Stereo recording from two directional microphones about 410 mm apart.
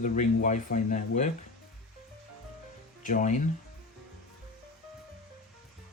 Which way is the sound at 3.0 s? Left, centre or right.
Centre.